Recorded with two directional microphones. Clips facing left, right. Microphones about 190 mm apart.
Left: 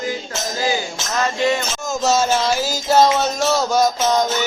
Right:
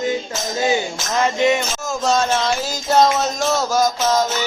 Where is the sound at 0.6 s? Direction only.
20° right (ahead or behind).